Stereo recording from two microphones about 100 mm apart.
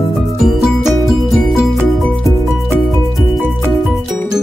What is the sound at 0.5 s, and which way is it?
Music, centre (ahead or behind).